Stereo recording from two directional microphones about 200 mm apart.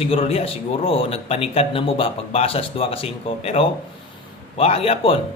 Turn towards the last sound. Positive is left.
turn(degrees=30)  # may be behind; listen again after turning